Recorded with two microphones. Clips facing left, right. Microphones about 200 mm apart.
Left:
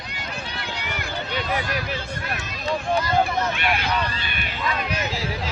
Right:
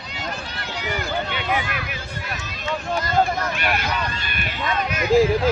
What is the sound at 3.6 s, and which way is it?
Speech, 45° right (ahead or behind).